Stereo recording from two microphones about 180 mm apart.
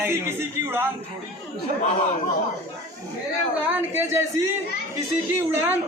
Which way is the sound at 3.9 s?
15° right (ahead or behind).